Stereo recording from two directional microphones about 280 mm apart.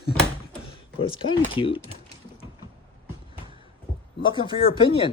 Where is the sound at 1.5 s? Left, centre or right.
Centre.